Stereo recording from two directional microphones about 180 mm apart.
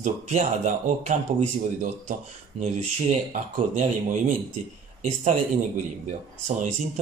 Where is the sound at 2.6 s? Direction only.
40° right (ahead or behind).